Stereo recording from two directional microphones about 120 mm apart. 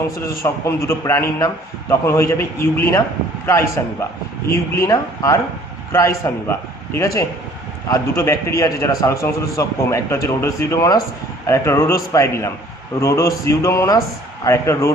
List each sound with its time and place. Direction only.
0.3 s a man's voice: 25° left (ahead or behind)
4.4 s a man's voice: 20° left (ahead or behind)